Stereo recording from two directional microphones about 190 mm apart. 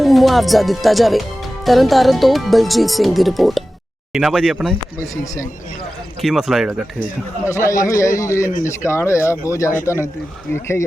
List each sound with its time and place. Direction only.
0.0 s speech: centre (ahead or behind)
4.9 s a man's voice: 15° left (ahead or behind)
6.2 s speech: centre (ahead or behind)
7.4 s a man's voice: 15° left (ahead or behind)